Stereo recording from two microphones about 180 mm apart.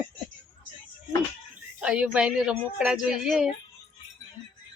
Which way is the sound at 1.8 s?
5° right (ahead or behind).